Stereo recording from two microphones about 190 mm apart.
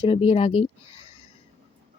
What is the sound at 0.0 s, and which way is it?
Speech, 30° left (ahead or behind).